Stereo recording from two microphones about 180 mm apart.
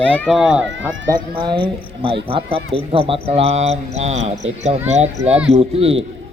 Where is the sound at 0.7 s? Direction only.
90° right.